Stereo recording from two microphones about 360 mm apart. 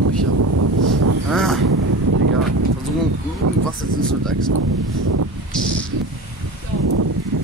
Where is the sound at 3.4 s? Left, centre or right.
Right.